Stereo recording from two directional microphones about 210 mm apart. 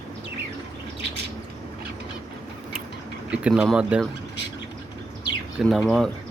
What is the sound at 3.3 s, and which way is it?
Speech, 5° right (ahead or behind).